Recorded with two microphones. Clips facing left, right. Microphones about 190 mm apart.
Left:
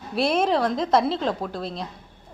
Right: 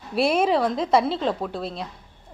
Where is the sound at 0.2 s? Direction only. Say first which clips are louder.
Right 1 dB; 5° right (ahead or behind).